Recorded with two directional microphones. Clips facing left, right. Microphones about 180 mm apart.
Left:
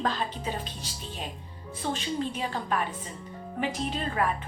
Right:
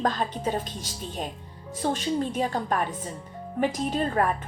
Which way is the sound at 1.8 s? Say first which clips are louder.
Right 4 dB; 45° right (ahead or behind).